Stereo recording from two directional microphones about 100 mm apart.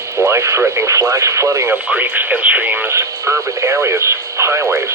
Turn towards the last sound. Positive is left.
turn(degrees=-30)  # may be behind; listen again after turning